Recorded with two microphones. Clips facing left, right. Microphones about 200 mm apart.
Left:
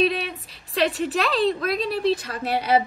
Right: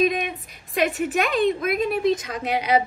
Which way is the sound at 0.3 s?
15° right (ahead or behind).